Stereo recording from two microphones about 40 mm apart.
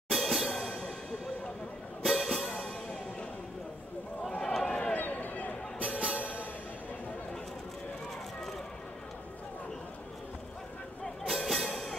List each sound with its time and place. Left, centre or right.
0.1 s music: centre
2.0 s music: centre
4.3 s a sound: centre
4.9 s a sound: left
5.9 s music: right
11.2 s music: centre
11.6 s music: centre